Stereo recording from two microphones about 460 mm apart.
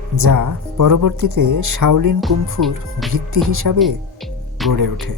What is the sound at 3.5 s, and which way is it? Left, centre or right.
Speech, right.